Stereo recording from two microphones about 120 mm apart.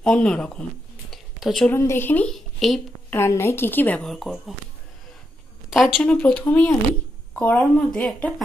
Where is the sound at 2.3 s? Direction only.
Centre (ahead or behind).